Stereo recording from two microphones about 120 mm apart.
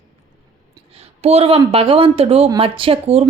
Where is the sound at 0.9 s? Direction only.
60° right (ahead or behind).